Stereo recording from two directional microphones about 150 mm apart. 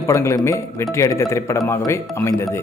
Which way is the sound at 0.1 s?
20° left (ahead or behind).